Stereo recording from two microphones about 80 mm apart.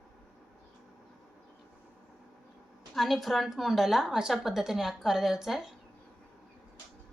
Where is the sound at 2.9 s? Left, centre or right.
Centre.